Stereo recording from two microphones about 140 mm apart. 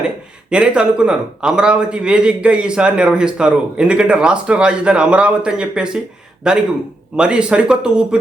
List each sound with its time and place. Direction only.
0.5 s a man's voice: 10° right (ahead or behind)